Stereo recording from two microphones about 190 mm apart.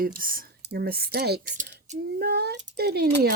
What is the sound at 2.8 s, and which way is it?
Speech, 55° right (ahead or behind).